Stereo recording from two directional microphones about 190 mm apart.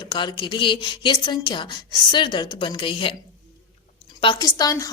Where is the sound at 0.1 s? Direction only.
25° left (ahead or behind).